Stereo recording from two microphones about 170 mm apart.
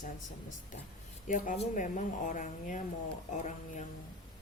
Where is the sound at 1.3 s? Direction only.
50° left (ahead or behind).